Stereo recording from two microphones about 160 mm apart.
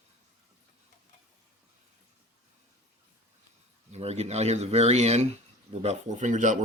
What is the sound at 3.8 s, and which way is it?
Speech, 45° right (ahead or behind).